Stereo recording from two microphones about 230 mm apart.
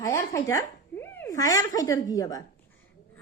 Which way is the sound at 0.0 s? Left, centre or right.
Centre.